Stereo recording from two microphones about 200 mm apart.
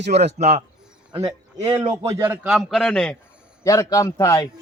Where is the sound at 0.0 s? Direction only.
55° right (ahead or behind).